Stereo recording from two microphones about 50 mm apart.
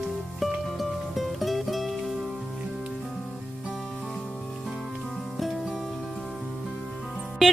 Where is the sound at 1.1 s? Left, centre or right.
Centre.